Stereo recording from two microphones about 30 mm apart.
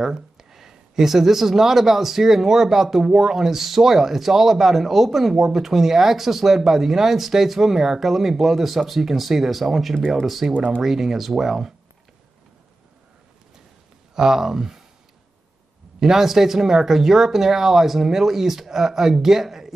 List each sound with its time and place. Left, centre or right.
0.0 s speech: centre
9.9 s speech: left
10.2 s speech: centre
14.1 s speech: centre
16.0 s speech: centre